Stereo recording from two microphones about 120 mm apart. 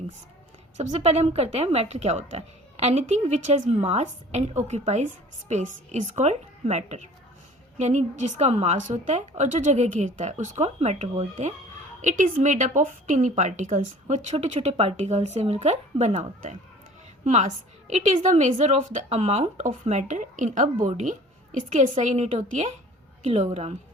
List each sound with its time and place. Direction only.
0.8 s a woman's voice: 65° right (ahead or behind)
12.0 s a woman's voice: 90° right; by 14.9 s 55° right (ahead or behind)
14.9 s a woman's voice: 70° right (ahead or behind)
17.2 s a woman's voice: 90° right; by 22.7 s 75° right (ahead or behind)
23.2 s a woman's voice: 60° right (ahead or behind)